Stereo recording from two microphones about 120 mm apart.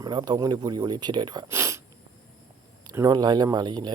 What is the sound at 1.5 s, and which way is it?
Speech, 25° right (ahead or behind).